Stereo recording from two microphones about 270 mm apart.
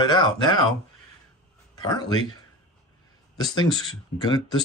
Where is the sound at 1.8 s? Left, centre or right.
Centre.